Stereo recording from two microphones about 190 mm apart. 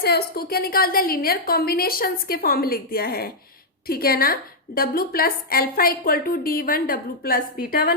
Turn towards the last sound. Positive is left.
turn(degrees=50)  # may be behind; listen again after turning